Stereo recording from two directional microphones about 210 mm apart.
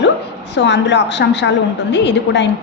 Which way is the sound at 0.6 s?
55° left (ahead or behind).